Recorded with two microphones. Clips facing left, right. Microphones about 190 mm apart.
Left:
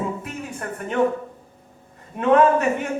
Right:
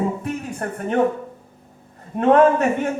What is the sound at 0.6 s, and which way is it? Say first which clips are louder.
Speech: right 2 dB; 40° right (ahead or behind).